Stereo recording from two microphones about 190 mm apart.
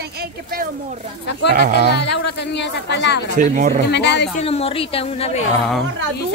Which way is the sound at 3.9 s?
65° left (ahead or behind).